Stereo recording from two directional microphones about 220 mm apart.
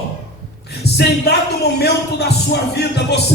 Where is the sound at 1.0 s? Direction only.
50° left (ahead or behind).